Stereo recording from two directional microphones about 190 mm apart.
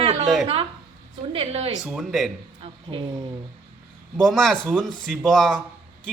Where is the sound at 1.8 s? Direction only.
5° right (ahead or behind).